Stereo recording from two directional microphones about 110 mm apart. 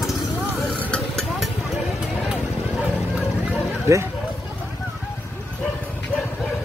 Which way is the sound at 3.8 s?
25° right (ahead or behind).